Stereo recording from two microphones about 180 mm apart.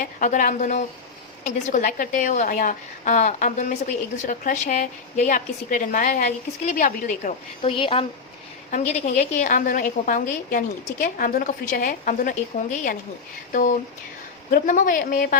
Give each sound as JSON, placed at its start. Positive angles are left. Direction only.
{"t": 0.0, "sound": "a woman's voice", "side_deg": 45}
{"t": 7.7, "sound": "a woman's voice", "side_deg": 30}